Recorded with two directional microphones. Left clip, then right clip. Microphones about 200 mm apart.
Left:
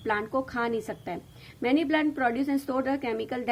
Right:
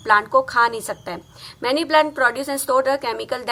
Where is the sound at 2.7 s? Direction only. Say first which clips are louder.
Right 10 dB; 30° left (ahead or behind).